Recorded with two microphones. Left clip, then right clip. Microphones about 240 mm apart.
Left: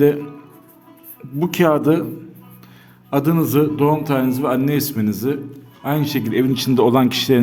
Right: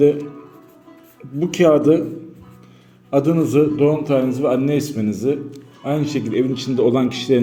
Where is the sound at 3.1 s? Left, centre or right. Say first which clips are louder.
Right 2 dB; left.